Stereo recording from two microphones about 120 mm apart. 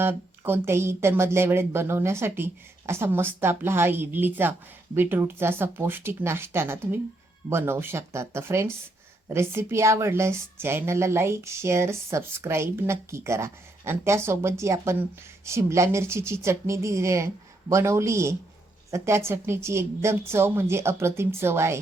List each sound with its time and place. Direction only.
0.0 s a woman's voice: 20° right (ahead or behind)